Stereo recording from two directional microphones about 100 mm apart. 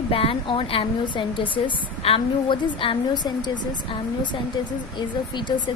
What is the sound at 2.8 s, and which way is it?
Speech, 55° left (ahead or behind).